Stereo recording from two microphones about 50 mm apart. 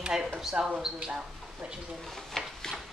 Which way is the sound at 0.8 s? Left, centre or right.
Centre.